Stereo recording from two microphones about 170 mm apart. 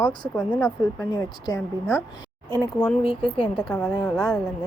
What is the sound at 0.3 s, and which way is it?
Speech, 5° left (ahead or behind).